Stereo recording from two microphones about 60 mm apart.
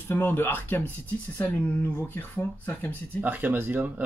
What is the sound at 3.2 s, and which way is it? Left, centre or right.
Speech, right.